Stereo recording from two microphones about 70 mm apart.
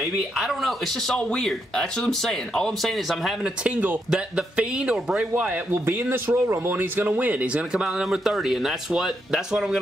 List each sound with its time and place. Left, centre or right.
0.0 s speech: centre
3.6 s speech: centre
5.3 s speech: right
5.9 s speech: right; by 9.8 s centre